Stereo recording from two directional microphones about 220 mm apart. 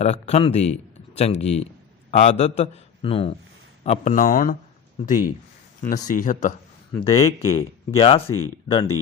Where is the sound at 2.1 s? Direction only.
30° left (ahead or behind).